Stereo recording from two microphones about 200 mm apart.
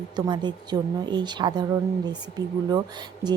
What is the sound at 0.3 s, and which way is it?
Speech, 20° right (ahead or behind).